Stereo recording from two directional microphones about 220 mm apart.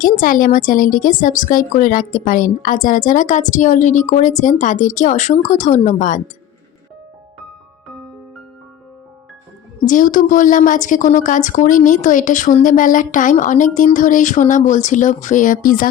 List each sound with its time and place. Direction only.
0.0 s a woman's voice: 40° left (ahead or behind)
9.8 s a woman's voice: 35° left (ahead or behind)